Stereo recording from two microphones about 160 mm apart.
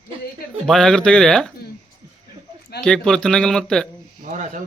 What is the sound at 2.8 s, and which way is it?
Speech, 5° left (ahead or behind).